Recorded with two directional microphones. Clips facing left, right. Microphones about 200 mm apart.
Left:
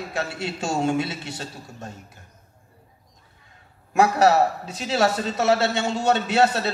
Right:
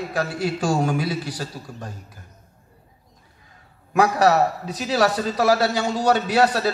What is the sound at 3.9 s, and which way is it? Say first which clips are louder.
A man's voice: even; 25° left (ahead or behind).